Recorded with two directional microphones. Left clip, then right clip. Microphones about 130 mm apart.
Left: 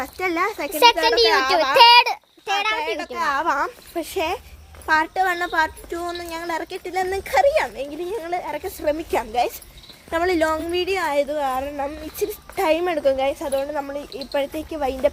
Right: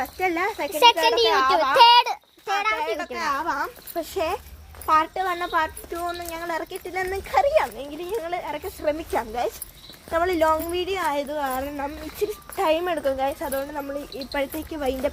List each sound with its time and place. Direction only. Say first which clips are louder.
0.0 s speech: left 1 dB; 50° left (ahead or behind)
0.7 s a child's voice: left 1 dB; 25° left (ahead or behind)
1.3 s a woman's voice: left 2 dB; 45° left (ahead or behind)
3.4 s a woman's voice: left 5 dB; 55° left (ahead or behind)
7.4 s a child's voice: left 2 dB; 35° left (ahead or behind)
7.8 s a woman's voice: left 2 dB; 65° left (ahead or behind)
8.4 s a woman's voice: left 2 dB; 45° left (ahead or behind)
8.6 s a woman's voice: left 3 dB; 60° left (ahead or behind)
10.2 s a child's voice: left 1 dB; 40° left (ahead or behind)
10.9 s a child's voice: left 4 dB; 45° left (ahead or behind)
12.5 s a woman's voice: left 2 dB; 60° left (ahead or behind)
13.2 s speech: left 4 dB; 40° left (ahead or behind); by 14.9 s 20° left (ahead or behind)